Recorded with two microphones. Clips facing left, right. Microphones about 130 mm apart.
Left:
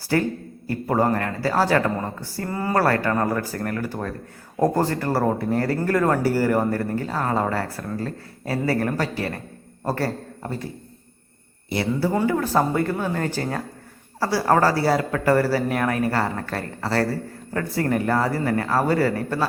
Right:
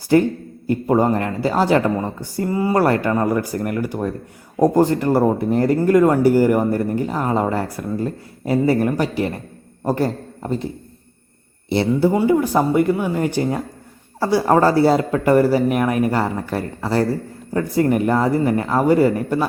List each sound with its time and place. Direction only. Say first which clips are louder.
0.1 s a man's voice: right 7 dB; 20° right (ahead or behind)
11.7 s speech: right 6 dB; 25° right (ahead or behind)